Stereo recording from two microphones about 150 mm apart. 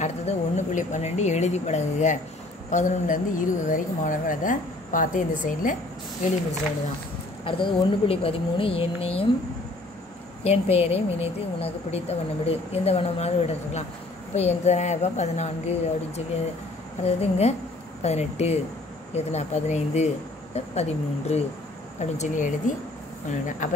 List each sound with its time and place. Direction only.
0.0 s a woman's voice: 50° left (ahead or behind)
7.4 s speech: 35° left (ahead or behind)
10.4 s a woman's voice: 45° left (ahead or behind)
17.0 s a woman's voice: 45° left (ahead or behind)